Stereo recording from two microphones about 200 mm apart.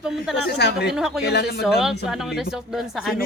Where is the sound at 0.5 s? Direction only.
55° left (ahead or behind).